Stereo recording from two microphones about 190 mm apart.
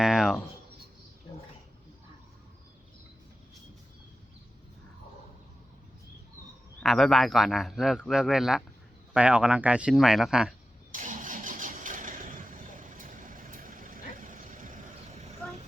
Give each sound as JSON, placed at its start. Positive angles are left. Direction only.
{"t": 0.0, "sound": "a sound", "side_deg": -5}
{"t": 6.7, "sound": "speech", "side_deg": 0}
{"t": 10.9, "sound": "vehicle", "side_deg": -45}